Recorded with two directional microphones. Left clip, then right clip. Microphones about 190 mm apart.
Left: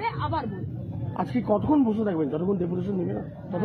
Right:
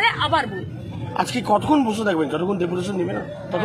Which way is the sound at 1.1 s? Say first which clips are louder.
Right 6 dB; 5° left (ahead or behind).